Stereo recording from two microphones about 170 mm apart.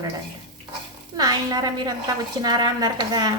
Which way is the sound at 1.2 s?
25° right (ahead or behind).